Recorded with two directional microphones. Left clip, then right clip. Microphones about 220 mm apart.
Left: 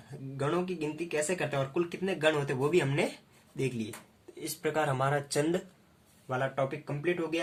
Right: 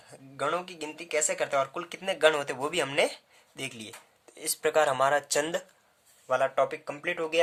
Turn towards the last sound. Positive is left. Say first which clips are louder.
# even
turn(degrees=-45)  # may be behind; listen again after turning